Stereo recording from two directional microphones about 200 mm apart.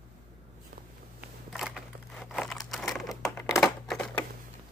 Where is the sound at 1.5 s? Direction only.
Centre (ahead or behind).